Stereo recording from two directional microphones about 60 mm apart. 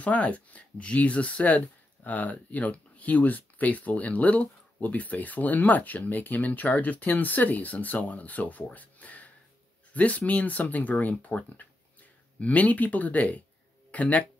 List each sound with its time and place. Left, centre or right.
0.0 s speech: left